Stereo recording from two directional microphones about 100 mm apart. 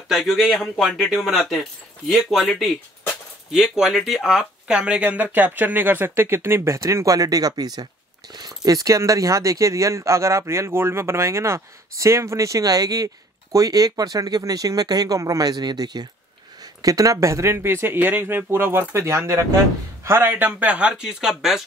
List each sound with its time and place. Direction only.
0.1 s speech: centre (ahead or behind); by 16.1 s 45° right (ahead or behind)
16.8 s speech: 35° right (ahead or behind); by 20.9 s 15° right (ahead or behind)
20.9 s speech: 5° right (ahead or behind)